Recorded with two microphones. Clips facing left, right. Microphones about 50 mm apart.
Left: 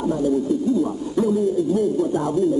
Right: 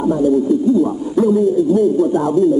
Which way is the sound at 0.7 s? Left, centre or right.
Centre.